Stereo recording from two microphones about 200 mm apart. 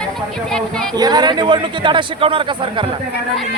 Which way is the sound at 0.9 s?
20° right (ahead or behind).